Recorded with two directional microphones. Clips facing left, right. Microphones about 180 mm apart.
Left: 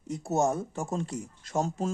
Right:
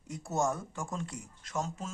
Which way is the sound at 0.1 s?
25° left (ahead or behind).